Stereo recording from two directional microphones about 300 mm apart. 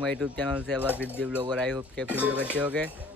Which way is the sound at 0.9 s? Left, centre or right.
Centre.